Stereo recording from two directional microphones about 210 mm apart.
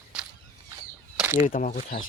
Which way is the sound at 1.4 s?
40° left (ahead or behind).